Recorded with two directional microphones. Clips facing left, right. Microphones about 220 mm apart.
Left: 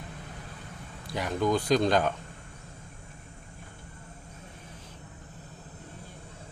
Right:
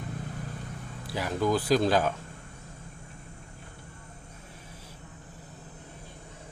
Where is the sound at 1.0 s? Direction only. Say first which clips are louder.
Even; 5° right (ahead or behind).